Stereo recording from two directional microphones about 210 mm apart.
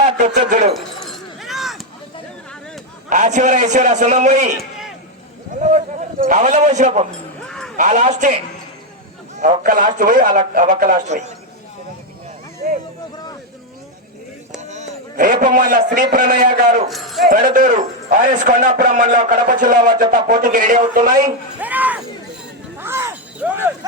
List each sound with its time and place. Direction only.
0.2 s a man's voice: 35° right (ahead or behind)
0.7 s chink: centre (ahead or behind)
3.1 s a man's voice: 35° right (ahead or behind)
5.5 s a man's voice: 35° right (ahead or behind)
7.4 s a sound: 5° left (ahead or behind)
7.8 s a man's voice: 35° right (ahead or behind)
14.6 s a sound: 35° right (ahead or behind)
15.9 s a man's voice: 40° right (ahead or behind)
16.9 s speech: centre (ahead or behind)
17.2 s a man's voice: 40° right (ahead or behind)
21.2 s a sound: 10° right (ahead or behind)